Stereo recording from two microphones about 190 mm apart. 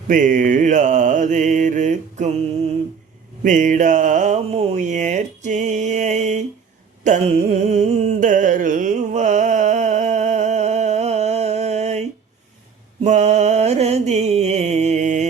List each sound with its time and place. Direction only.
0.1 s mantra: 45° right (ahead or behind)
3.4 s speech: 40° right (ahead or behind)
7.0 s a sound: 40° right (ahead or behind)
13.1 s mantra: 40° right (ahead or behind)